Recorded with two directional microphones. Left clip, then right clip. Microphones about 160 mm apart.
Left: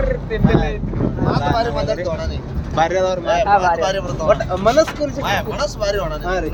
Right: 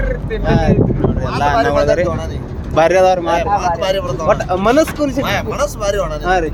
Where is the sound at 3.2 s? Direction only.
30° right (ahead or behind).